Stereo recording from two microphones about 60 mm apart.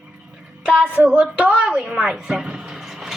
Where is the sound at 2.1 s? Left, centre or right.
Centre.